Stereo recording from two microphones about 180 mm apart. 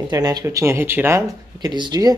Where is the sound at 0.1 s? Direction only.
20° right (ahead or behind).